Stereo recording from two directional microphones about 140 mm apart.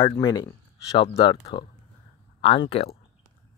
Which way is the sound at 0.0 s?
30° left (ahead or behind).